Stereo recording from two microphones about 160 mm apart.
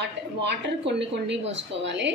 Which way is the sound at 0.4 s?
90° right.